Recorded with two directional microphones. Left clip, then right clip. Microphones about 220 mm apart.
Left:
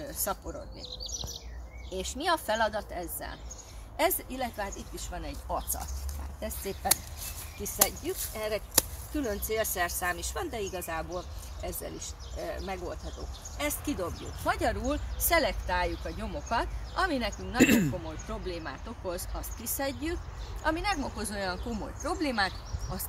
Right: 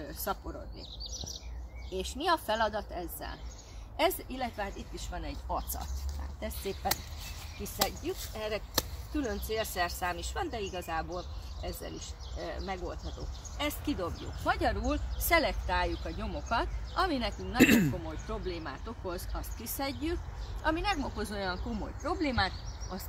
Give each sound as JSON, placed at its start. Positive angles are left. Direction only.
{"t": 0.1, "sound": "a sound", "side_deg": 25}
{"t": 2.0, "sound": "speech", "side_deg": 20}
{"t": 8.0, "sound": "speech", "side_deg": 15}
{"t": 13.9, "sound": "speech", "side_deg": 15}
{"t": 17.6, "sound": "speech", "side_deg": 0}
{"t": 18.3, "sound": "speech", "side_deg": 15}